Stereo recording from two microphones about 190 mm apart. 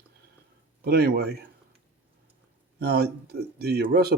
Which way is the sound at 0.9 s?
55° right (ahead or behind).